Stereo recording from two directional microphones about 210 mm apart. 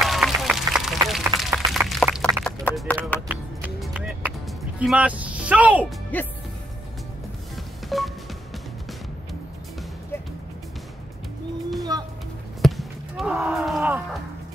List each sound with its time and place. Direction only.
0.0 s a sound: centre (ahead or behind)
3.3 s music: 5° right (ahead or behind)
6.1 s music: 10° left (ahead or behind)
7.9 s music: centre (ahead or behind)
11.9 s music: 20° right (ahead or behind)
12.6 s basketball bounce: centre (ahead or behind)